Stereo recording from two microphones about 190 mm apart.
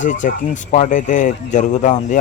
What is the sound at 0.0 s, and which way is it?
Speech, 40° left (ahead or behind).